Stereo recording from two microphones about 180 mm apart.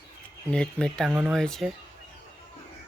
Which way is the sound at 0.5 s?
5° left (ahead or behind).